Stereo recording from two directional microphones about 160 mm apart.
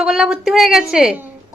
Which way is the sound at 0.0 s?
Centre (ahead or behind).